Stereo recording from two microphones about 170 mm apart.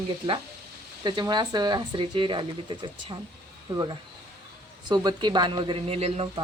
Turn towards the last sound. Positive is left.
turn(degrees=-35)  # may be behind; listen again after turning